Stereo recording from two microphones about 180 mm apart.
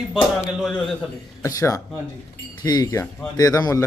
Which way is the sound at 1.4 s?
20° left (ahead or behind).